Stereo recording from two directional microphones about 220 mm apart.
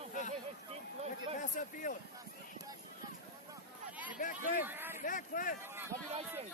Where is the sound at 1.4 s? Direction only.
35° left (ahead or behind).